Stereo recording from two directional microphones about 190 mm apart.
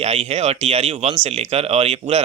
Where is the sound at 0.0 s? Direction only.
35° right (ahead or behind).